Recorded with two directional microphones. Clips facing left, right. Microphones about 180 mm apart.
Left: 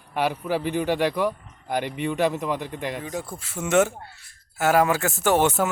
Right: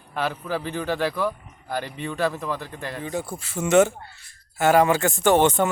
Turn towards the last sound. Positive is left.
turn(degrees=5)  # may be behind; listen again after turning